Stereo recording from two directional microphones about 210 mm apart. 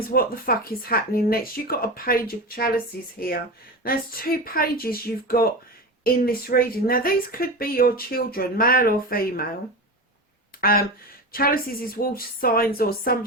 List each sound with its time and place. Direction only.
0.1 s speech: 45° left (ahead or behind)
10.6 s speech: 45° left (ahead or behind)